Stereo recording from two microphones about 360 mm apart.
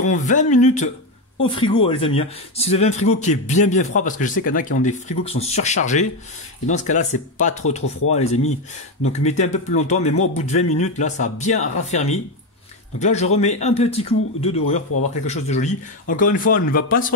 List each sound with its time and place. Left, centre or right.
0.0 s speech: left